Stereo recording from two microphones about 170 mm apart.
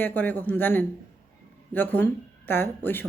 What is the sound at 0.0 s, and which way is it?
A woman's voice, 10° left (ahead or behind).